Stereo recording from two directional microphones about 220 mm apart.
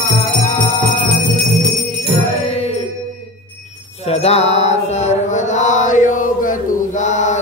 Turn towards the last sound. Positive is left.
turn(degrees=35)  # may be behind; listen again after turning